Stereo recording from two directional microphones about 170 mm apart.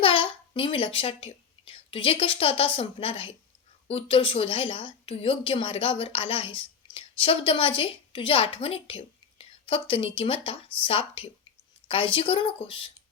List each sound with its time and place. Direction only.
0.0 s a child's voice: 30° left (ahead or behind)